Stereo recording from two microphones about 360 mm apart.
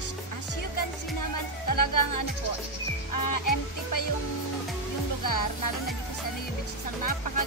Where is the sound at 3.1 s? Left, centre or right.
Left.